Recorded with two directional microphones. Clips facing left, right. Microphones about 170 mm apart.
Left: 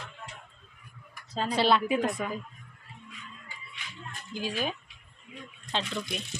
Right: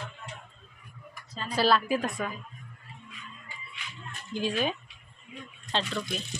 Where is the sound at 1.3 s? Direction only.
80° left.